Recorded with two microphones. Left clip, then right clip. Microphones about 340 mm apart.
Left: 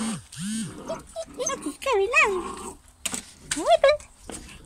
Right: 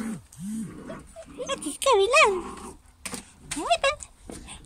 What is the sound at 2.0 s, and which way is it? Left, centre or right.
Dog, centre.